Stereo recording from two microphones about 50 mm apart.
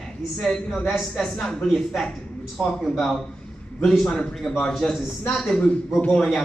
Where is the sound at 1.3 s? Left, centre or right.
Centre.